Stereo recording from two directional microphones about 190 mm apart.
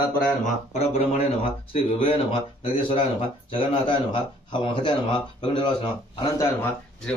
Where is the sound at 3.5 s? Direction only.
25° left (ahead or behind).